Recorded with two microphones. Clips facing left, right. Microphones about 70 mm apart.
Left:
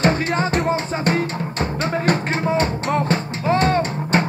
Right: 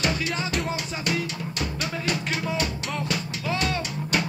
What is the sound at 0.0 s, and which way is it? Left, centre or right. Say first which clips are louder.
Music: left 8 dB; left.